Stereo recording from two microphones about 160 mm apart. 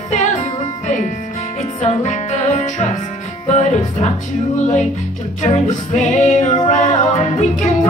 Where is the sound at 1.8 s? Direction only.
50° left (ahead or behind).